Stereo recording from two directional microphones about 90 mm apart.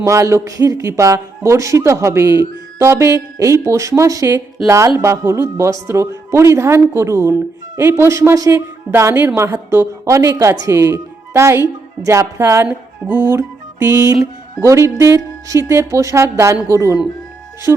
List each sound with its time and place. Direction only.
0.0 s a woman's voice: 35° right (ahead or behind)
0.8 s a woman's voice: 30° right (ahead or behind)
2.7 s music: 30° right (ahead or behind)
3.3 s a woman's voice: 35° right (ahead or behind)